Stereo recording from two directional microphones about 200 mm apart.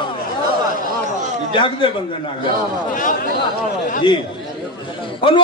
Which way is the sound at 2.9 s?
40° left (ahead or behind).